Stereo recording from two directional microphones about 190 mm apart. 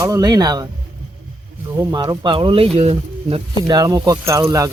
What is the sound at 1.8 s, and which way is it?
Speech, 20° right (ahead or behind).